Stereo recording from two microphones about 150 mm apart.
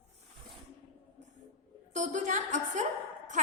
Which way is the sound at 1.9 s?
55° right (ahead or behind).